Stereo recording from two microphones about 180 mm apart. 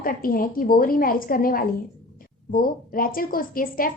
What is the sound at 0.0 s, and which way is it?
A woman's voice, 50° left (ahead or behind).